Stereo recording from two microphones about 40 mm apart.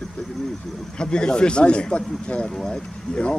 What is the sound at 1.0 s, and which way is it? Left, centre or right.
Speech, left.